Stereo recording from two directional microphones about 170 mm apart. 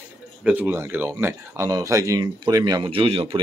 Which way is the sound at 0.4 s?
10° right (ahead or behind).